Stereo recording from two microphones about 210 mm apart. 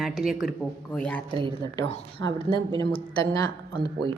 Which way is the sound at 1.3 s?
25° right (ahead or behind).